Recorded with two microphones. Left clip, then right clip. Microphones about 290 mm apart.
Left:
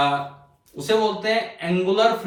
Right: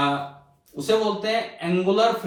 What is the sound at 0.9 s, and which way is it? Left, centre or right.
Speech, centre.